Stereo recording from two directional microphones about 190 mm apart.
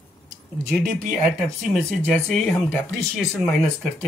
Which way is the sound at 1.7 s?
Centre (ahead or behind).